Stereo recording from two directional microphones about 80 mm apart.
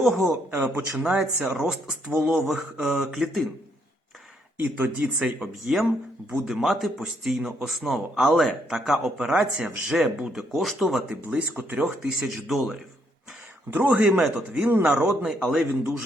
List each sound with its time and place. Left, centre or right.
0.0 s speech: centre
0.5 s speech: right; by 3.4 s centre
4.6 s speech: right
5.2 s speech: centre
11.3 s speech: centre
11.9 s speech: centre
13.7 s speech: right
14.2 s speech: centre
15.3 s speech: centre